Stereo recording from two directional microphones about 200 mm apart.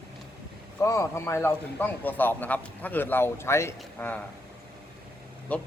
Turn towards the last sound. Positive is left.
turn(degrees=5)  # may be behind; listen again after turning